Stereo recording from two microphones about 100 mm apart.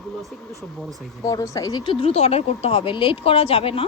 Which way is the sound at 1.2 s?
35° left (ahead or behind).